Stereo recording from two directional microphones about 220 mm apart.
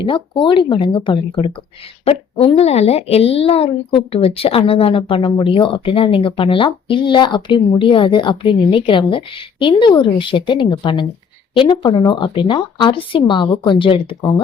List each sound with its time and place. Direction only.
0.0 s speech: 20° left (ahead or behind)